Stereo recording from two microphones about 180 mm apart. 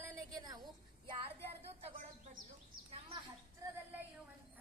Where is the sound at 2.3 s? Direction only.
40° right (ahead or behind).